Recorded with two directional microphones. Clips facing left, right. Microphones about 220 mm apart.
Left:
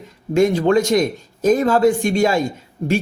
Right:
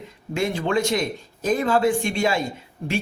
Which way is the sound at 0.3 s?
45° left (ahead or behind).